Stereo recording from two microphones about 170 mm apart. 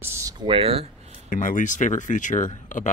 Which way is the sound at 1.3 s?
50° left (ahead or behind).